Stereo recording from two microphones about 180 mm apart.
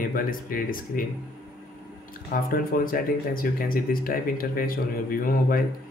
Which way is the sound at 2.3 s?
50° left (ahead or behind).